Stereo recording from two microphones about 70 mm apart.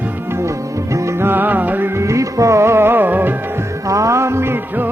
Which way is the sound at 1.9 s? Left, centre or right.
Right.